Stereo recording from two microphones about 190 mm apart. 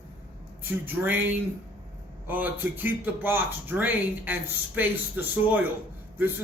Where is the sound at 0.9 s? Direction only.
10° right (ahead or behind).